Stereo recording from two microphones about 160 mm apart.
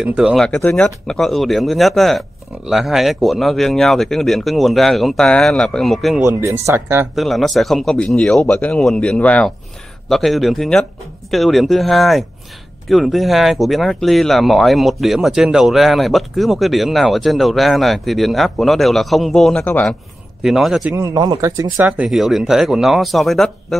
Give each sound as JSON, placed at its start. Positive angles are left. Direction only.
{"t": 0.0, "sound": "speech", "side_deg": -5}
{"t": 0.7, "sound": "speech", "side_deg": 5}
{"t": 6.2, "sound": "speech", "side_deg": -20}
{"t": 7.2, "sound": "speech", "side_deg": 0}
{"t": 20.9, "sound": "speech", "side_deg": -20}
{"t": 21.7, "sound": "speech", "side_deg": -10}